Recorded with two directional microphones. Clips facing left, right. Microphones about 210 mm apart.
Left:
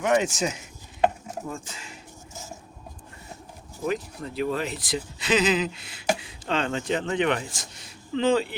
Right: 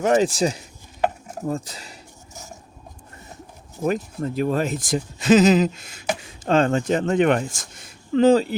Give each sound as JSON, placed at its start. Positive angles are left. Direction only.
{"t": 0.0, "sound": "speech", "side_deg": -35}
{"t": 3.8, "sound": "speech", "side_deg": -45}